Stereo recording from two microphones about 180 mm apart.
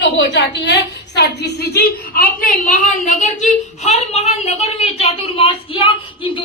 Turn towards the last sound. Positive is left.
turn(degrees=30)  # may be behind; listen again after turning